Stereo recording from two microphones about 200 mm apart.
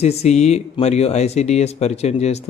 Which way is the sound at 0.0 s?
35° left (ahead or behind).